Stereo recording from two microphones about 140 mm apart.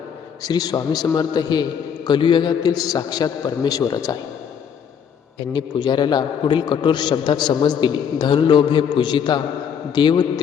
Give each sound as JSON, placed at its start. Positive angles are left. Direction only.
{"t": 0.4, "sound": "a man's voice", "side_deg": 30}
{"t": 5.5, "sound": "a man's voice", "side_deg": 35}